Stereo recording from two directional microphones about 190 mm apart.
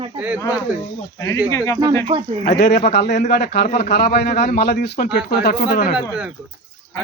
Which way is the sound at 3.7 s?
35° left (ahead or behind).